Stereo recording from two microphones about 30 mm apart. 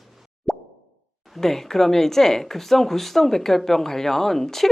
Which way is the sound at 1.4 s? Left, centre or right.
Centre.